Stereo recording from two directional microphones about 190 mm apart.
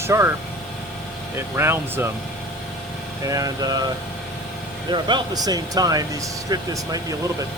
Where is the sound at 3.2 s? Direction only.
20° right (ahead or behind).